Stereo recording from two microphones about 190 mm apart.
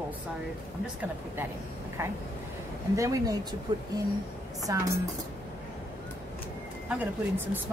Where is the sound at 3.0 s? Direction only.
15° right (ahead or behind).